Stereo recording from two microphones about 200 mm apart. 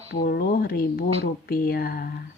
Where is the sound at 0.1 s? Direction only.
55° left (ahead or behind).